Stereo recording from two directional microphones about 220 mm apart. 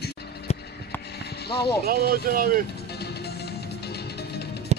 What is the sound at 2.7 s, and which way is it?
Music, 45° left (ahead or behind).